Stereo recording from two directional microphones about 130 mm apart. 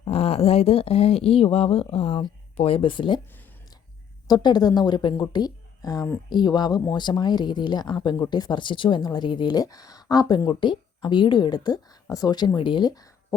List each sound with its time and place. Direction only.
0.1 s speech: 50° left (ahead or behind)
4.3 s speech: 30° left (ahead or behind)